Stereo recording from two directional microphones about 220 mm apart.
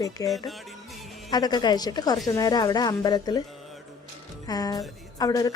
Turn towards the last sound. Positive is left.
turn(degrees=15)  # may be behind; listen again after turning